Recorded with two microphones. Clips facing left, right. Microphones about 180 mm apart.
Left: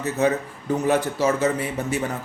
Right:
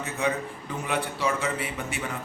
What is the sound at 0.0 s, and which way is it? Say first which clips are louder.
A man's voice: left 6 dB; 40° left (ahead or behind).